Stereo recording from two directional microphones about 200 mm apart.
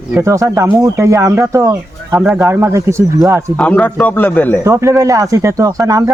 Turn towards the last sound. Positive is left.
turn(degrees=-15)  # may be behind; listen again after turning